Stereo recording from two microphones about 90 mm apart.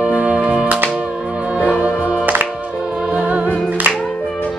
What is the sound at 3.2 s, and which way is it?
Music, 15° right (ahead or behind).